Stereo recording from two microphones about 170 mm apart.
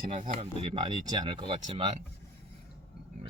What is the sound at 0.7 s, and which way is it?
Speech, 25° right (ahead or behind).